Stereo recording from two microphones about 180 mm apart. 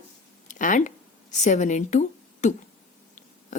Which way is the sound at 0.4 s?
45° left (ahead or behind).